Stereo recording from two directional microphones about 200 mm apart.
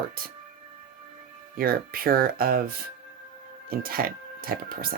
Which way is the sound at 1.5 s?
45° right (ahead or behind).